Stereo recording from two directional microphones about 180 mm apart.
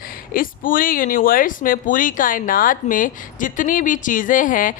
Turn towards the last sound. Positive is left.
turn(degrees=50)  # may be behind; listen again after turning